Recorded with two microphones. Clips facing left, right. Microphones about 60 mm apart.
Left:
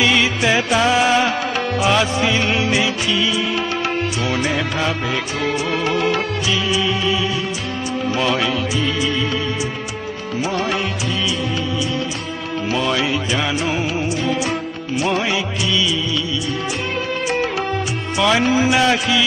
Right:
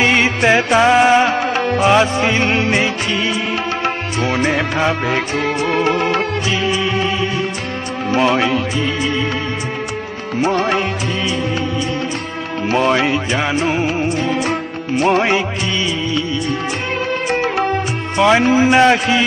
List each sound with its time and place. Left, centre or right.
0.0 s music: right
8.1 s speech: right
9.0 s music: right
10.4 s music: right
12.6 s music: right
18.2 s music: right